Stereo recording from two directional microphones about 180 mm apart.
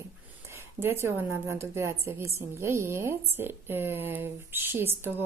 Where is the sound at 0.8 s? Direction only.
15° right (ahead or behind).